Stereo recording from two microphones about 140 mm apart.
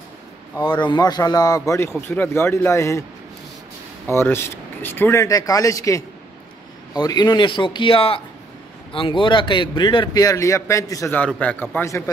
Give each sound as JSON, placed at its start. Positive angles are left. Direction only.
{"t": 0.7, "sound": "speech", "side_deg": 35}
{"t": 4.1, "sound": "a man's voice", "side_deg": 15}
{"t": 11.1, "sound": "speech", "side_deg": 10}